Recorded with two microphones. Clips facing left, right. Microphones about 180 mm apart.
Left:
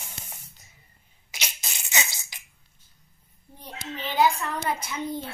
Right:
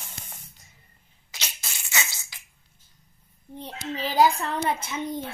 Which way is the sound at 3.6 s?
35° right (ahead or behind).